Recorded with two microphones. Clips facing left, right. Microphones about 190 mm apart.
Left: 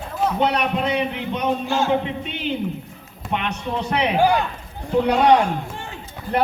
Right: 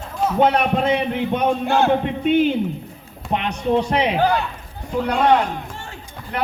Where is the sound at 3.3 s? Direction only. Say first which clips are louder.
Right 5 dB; 35° right (ahead or behind).